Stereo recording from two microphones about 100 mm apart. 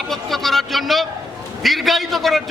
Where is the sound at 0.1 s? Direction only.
Centre (ahead or behind).